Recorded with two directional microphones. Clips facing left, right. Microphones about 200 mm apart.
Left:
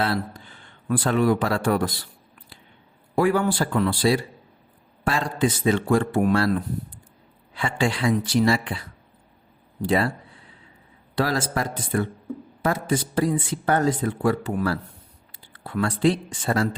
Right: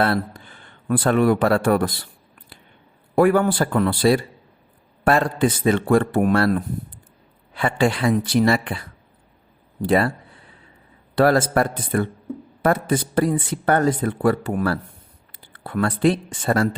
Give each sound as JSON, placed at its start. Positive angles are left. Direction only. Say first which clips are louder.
{"t": 0.0, "sound": "speech", "louder": "right 4 dB", "side_deg": -55}
{"t": 3.2, "sound": "speech", "louder": "right 4 dB", "side_deg": -55}
{"t": 9.8, "sound": "speech", "louder": "right 3 dB", "side_deg": -60}
{"t": 11.1, "sound": "speech", "louder": "right 7 dB", "side_deg": -55}